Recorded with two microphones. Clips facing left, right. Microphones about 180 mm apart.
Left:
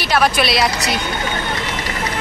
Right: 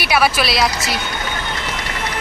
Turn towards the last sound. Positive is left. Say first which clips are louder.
# left 1 dB
turn(degrees=0)  # may be behind; listen again after turning